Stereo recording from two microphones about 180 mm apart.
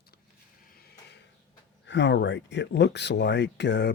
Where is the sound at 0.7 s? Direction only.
60° left (ahead or behind).